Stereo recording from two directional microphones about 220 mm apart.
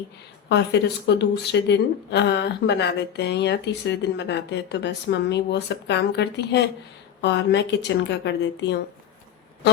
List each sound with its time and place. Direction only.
0.4 s a woman's voice: 50° left (ahead or behind)